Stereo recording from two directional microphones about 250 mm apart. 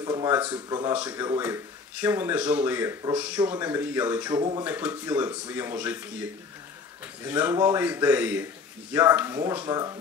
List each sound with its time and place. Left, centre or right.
0.0 s speech: centre
7.2 s speech: centre